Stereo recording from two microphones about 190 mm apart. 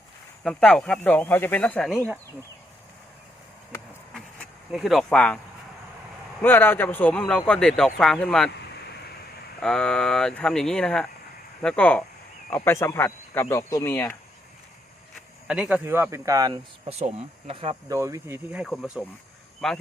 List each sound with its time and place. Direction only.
0.4 s speech: 5° left (ahead or behind)
4.1 s a sound: centre (ahead or behind)
6.4 s a man's voice: 10° left (ahead or behind)
9.6 s a man's voice: 5° left (ahead or behind)
15.1 s speech: 5° right (ahead or behind)
17.0 s speech: 30° right (ahead or behind)
17.8 s speech: 15° right (ahead or behind)
18.6 s a man's voice: centre (ahead or behind)